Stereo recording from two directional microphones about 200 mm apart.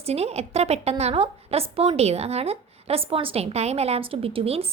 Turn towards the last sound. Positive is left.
turn(degrees=-30)  # may be behind; listen again after turning